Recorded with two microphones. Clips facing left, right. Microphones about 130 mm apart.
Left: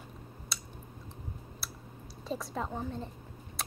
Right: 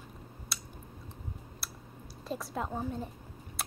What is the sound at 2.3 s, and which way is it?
Speech, centre (ahead or behind).